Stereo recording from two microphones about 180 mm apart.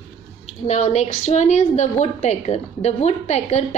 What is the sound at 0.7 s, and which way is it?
A woman's voice, 40° left (ahead or behind).